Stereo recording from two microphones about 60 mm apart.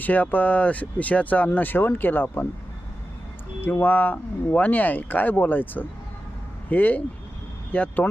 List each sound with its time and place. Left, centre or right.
0.0 s speech: left
3.6 s speech: left